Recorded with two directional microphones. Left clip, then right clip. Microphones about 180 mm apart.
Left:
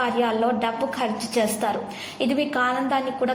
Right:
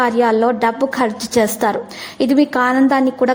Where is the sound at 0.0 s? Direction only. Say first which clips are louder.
Right 8 dB; 40° right (ahead or behind).